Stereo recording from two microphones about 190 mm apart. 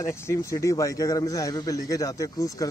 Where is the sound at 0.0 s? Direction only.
15° left (ahead or behind).